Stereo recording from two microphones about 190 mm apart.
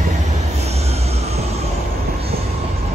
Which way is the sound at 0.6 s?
35° right (ahead or behind).